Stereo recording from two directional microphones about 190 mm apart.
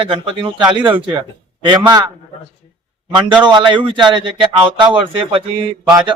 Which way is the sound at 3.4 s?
25° right (ahead or behind).